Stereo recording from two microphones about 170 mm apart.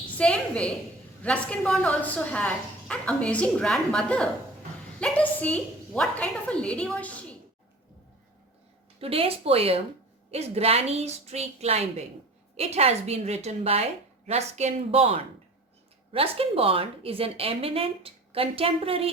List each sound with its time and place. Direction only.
0.2 s a woman's voice: 5° left (ahead or behind)
9.0 s a woman's voice: 35° right (ahead or behind)